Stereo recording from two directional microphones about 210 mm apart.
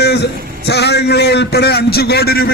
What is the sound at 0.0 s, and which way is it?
A man's voice, 50° left (ahead or behind).